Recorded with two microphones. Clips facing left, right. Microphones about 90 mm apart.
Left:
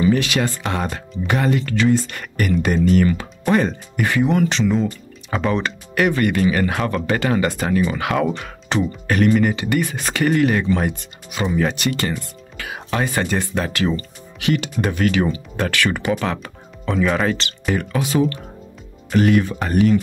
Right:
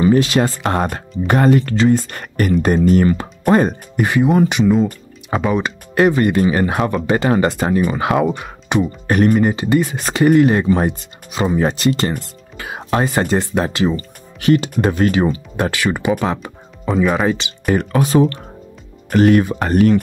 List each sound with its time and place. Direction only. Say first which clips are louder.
0.0 s speech: right 4 dB; 35° right (ahead or behind)
0.7 s speech: right 5 dB; 45° right (ahead or behind); by 5.7 s 10° right (ahead or behind)
5.9 s speech: right 4 dB; 25° right (ahead or behind)
9.0 s speech: right 2 dB; 35° right (ahead or behind)
10.0 s speech: right 6 dB; 15° right (ahead or behind)
10.5 s speech: right 4 dB; 30° right (ahead or behind)
14.4 s speech: right 6 dB; 35° right (ahead or behind)
15.5 s speech: right 2 dB; 20° right (ahead or behind)
16.3 s music: right 3 dB; 20° right (ahead or behind)
16.9 s speech: right 3 dB; 5° right (ahead or behind)
17.9 s speech: right 5 dB; 40° right (ahead or behind)